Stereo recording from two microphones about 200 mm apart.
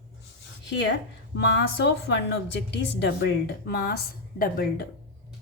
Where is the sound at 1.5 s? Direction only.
60° left (ahead or behind).